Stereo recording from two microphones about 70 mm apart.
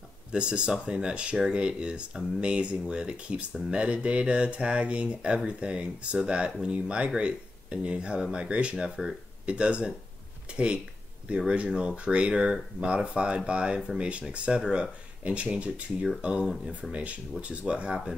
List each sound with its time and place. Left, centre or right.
0.3 s speech: centre